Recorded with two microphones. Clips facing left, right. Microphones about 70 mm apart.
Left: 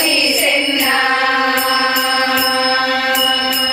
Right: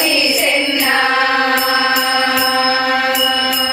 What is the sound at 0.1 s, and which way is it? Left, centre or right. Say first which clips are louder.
Music: right 1 dB; right.